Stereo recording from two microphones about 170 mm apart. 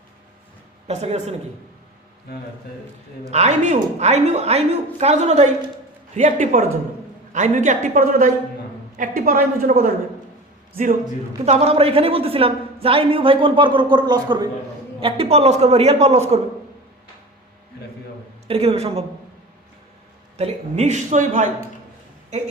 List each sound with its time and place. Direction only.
0.9 s a woman's voice: 40° right (ahead or behind)
3.2 s a woman's voice: 40° right (ahead or behind)
11.4 s a woman's voice: 35° right (ahead or behind)
18.4 s a woman's voice: 35° right (ahead or behind)
20.3 s a woman's voice: 40° right (ahead or behind)